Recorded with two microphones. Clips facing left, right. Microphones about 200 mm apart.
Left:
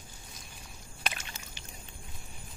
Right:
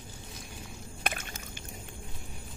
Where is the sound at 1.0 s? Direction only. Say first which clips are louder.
Right 3 dB; 50° right (ahead or behind).